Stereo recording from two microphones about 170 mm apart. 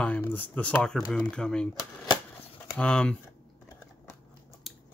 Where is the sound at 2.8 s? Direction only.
5° left (ahead or behind).